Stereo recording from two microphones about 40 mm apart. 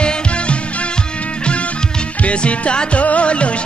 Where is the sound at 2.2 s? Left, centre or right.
Left.